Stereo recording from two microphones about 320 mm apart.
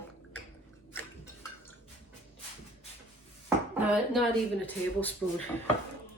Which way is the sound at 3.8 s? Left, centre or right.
Centre.